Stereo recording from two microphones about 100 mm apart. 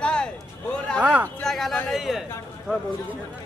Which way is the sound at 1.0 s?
15° right (ahead or behind).